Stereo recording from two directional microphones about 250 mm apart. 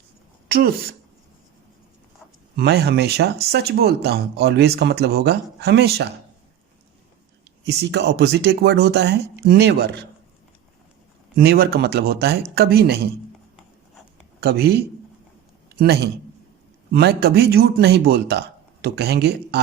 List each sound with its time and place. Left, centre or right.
0.4 s speech: right
2.6 s a man's voice: right
7.6 s a man's voice: right
11.3 s a man's voice: right
14.4 s a man's voice: right
16.9 s a man's voice: right